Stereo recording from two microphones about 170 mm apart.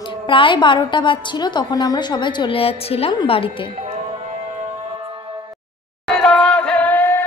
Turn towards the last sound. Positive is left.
turn(degrees=10)  # may be behind; listen again after turning